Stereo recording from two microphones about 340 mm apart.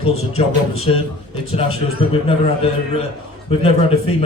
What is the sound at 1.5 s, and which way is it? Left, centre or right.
Speech, centre.